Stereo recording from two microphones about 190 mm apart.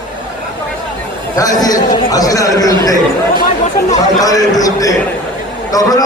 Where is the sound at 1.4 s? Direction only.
20° left (ahead or behind).